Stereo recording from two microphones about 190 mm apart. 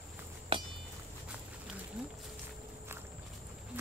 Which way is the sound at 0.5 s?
30° right (ahead or behind).